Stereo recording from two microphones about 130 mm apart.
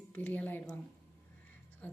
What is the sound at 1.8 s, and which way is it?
Speech, 10° left (ahead or behind).